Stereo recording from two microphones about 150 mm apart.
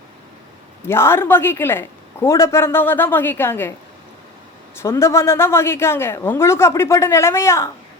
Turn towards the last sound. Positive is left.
turn(degrees=20)  # may be behind; listen again after turning